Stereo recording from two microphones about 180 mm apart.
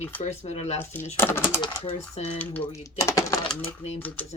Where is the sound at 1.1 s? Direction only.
15° left (ahead or behind).